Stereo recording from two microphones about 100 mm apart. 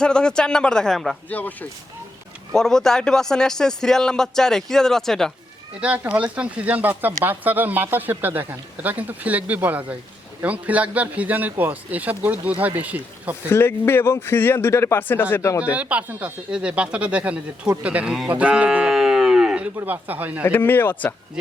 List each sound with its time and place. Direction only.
0.0 s speech: 10° left (ahead or behind)
1.3 s speech: 15° left (ahead or behind)
2.5 s speech: 5° left (ahead or behind)
5.8 s speech: 10° right (ahead or behind)
13.5 s speech: 25° left (ahead or behind)
15.6 s speech: 15° right (ahead or behind)
18.3 s livestock: 15° right (ahead or behind)
19.8 s speech: 20° right (ahead or behind)
20.4 s speech: 20° left (ahead or behind)